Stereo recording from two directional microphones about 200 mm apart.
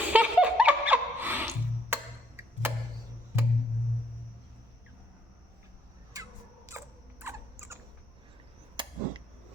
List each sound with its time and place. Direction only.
0.1 s music: 5° right (ahead or behind)
6.1 s a sound: 15° right (ahead or behind)
6.7 s rodents: 10° right (ahead or behind)
8.7 s chop: 25° right (ahead or behind)